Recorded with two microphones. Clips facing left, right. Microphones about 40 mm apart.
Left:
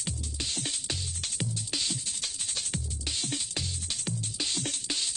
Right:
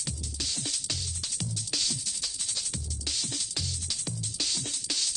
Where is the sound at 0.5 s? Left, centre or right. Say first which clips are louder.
Left 1 dB; left.